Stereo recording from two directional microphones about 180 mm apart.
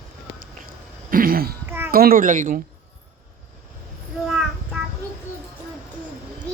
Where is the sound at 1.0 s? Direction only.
55° right (ahead or behind).